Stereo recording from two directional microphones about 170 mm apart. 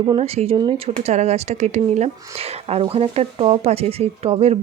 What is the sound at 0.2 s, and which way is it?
Speech, 40° right (ahead or behind).